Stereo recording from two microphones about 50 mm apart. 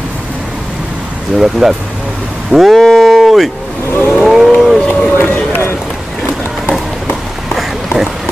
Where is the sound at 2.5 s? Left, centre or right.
Centre.